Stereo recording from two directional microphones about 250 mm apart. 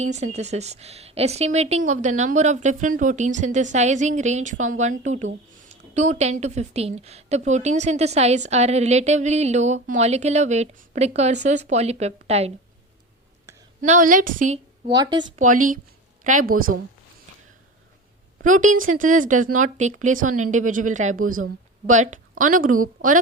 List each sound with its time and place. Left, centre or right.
0.1 s a woman's voice: right
13.8 s speech: right
14.8 s speech: centre
15.4 s speech: right
18.3 s a woman's voice: right